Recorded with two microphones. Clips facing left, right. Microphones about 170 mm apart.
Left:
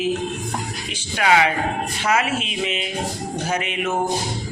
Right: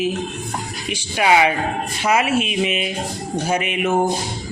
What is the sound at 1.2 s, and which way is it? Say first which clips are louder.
Speech: right 2 dB; 20° right (ahead or behind).